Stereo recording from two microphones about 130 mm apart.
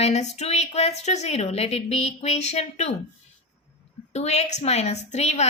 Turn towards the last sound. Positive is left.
turn(degrees=60)  # may be behind; listen again after turning